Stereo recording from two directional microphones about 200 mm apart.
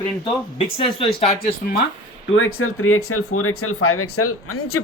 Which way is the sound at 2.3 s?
85° left.